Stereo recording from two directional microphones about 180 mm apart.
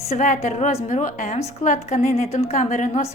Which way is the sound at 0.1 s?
40° left (ahead or behind).